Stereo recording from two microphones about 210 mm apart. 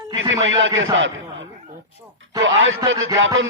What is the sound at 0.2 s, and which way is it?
Speech, 65° right (ahead or behind).